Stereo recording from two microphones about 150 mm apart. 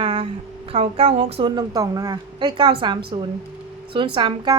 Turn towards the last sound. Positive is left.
turn(degrees=-35)  # may be behind; listen again after turning